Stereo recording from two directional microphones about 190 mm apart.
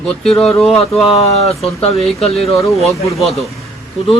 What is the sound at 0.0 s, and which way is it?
Speech, 5° left (ahead or behind).